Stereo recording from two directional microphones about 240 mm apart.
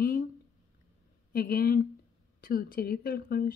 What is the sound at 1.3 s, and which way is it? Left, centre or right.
A woman's voice, left.